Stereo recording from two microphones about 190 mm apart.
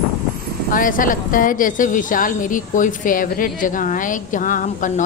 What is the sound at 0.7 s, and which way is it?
A woman's voice, 45° left (ahead or behind).